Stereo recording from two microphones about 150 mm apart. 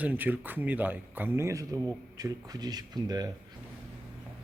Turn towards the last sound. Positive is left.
turn(degrees=-25)  # may be behind; listen again after turning